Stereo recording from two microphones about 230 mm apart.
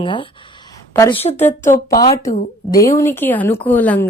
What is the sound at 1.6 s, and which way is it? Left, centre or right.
Speech, left.